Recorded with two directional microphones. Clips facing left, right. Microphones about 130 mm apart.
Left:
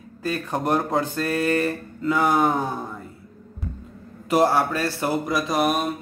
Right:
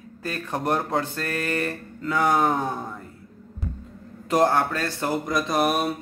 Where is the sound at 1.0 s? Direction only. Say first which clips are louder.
Left 5 dB; 15° left (ahead or behind).